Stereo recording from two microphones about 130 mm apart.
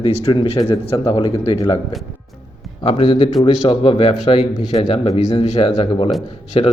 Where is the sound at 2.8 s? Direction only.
45° left (ahead or behind).